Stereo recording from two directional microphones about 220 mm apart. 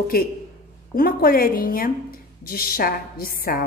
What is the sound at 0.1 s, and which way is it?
A woman's voice, 40° left (ahead or behind).